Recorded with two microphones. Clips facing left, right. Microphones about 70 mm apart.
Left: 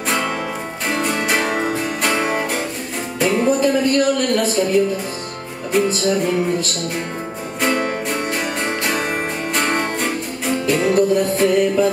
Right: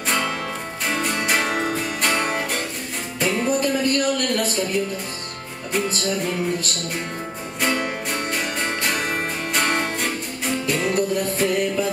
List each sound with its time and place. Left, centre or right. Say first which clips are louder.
0.8 s music: left 3 dB; centre
5.7 s music: left 6 dB; centre